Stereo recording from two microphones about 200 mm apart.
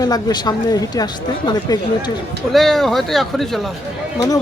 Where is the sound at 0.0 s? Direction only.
20° left (ahead or behind).